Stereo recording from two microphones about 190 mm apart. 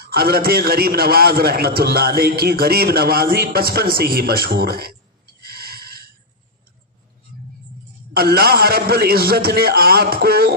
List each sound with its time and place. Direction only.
0.0 s a man's voice: 55° right (ahead or behind)
8.2 s a man's voice: 55° right (ahead or behind)